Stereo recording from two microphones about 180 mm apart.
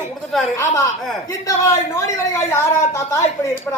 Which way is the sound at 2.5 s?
15° left (ahead or behind).